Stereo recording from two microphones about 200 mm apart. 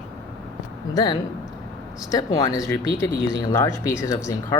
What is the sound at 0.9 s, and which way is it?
A man's voice, 20° left (ahead or behind).